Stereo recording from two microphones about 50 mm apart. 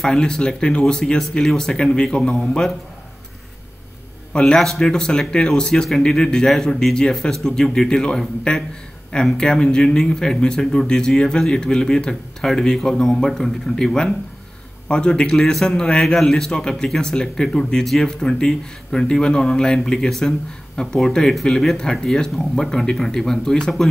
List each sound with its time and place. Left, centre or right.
0.0 s speech: centre
4.3 s a man's voice: centre
18.2 s speech: centre